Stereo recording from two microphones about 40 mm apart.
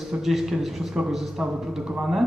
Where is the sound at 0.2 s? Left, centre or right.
Centre.